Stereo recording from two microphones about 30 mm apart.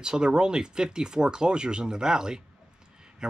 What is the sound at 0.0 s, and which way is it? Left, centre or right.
Speech, right.